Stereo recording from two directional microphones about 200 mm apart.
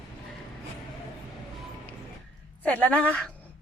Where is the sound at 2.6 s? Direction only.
5° left (ahead or behind).